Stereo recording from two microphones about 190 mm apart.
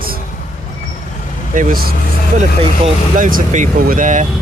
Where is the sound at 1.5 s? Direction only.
50° right (ahead or behind).